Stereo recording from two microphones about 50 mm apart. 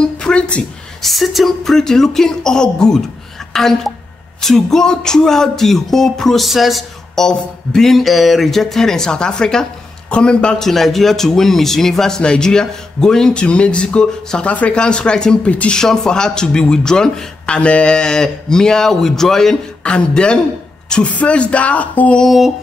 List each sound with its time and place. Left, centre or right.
0.2 s a sound: centre
1.0 s a man's voice: centre
7.2 s a man's voice: centre
14.4 s a man's voice: left; by 19.5 s centre
19.8 s speech: left